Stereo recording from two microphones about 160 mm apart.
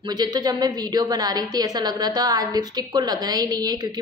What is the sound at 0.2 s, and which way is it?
A woman's voice, 25° right (ahead or behind).